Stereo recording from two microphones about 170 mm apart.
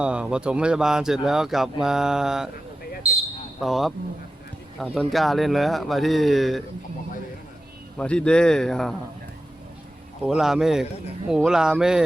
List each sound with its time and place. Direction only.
0.0 s speech: 5° right (ahead or behind)
3.6 s speech: centre (ahead or behind)
7.9 s speech: 5° left (ahead or behind)
10.2 s speech: centre (ahead or behind)